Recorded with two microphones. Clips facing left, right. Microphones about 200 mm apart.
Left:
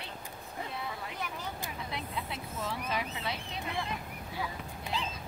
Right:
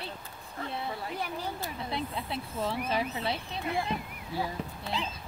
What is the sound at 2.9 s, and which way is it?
Speech, 30° right (ahead or behind).